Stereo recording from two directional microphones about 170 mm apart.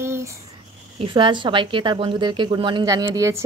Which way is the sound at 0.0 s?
15° right (ahead or behind).